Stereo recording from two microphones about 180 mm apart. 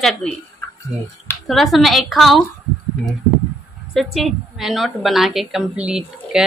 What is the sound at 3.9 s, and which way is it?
Speech, centre (ahead or behind).